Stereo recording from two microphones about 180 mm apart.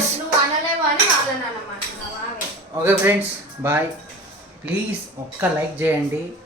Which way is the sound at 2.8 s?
10° right (ahead or behind).